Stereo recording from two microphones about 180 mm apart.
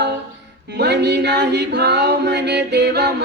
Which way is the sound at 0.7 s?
70° right (ahead or behind).